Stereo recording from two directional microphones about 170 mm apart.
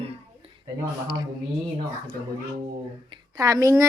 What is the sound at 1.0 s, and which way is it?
Speech, 25° right (ahead or behind).